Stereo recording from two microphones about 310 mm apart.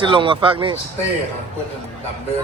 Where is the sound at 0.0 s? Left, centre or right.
Centre.